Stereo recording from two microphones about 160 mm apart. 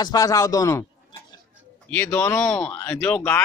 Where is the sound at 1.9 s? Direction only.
15° left (ahead or behind).